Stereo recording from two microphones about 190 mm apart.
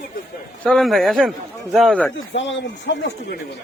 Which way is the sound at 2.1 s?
75° left (ahead or behind).